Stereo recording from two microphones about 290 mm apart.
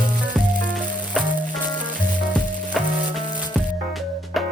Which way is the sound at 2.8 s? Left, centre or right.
Centre.